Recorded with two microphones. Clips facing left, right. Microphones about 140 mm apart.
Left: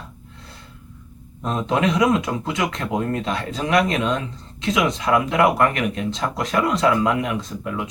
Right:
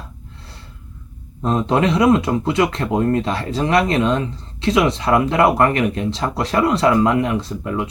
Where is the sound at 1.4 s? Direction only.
35° right (ahead or behind).